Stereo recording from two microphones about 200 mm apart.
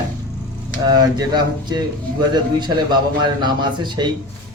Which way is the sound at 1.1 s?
20° right (ahead or behind).